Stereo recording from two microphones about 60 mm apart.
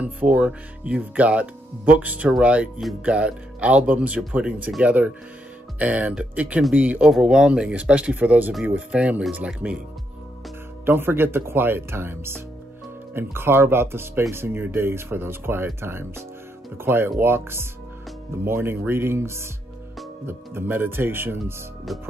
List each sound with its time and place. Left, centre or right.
0.0 s speech: right
7.1 s speech: centre
10.9 s speech: right
20.2 s speech: right